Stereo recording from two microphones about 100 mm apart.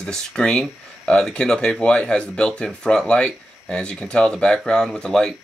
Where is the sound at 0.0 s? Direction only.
5° left (ahead or behind).